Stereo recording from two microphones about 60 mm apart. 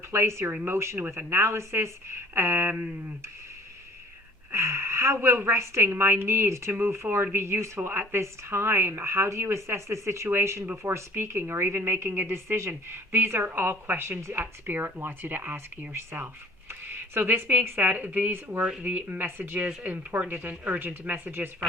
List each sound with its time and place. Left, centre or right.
0.1 s a woman's voice: right
4.5 s a woman's voice: right
12.0 s speech: right
14.2 s a woman's voice: right
14.4 s speech: right
17.5 s speech: right